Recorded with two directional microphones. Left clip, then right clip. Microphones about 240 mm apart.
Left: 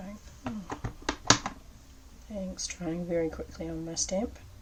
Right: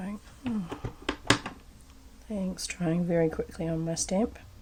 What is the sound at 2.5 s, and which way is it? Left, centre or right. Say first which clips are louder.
Speech: right 4 dB; right.